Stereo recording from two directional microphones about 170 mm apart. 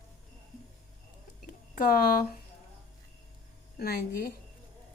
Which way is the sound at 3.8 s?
65° left (ahead or behind).